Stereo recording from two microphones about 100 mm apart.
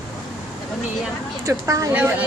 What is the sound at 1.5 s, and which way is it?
Speech, 35° right (ahead or behind).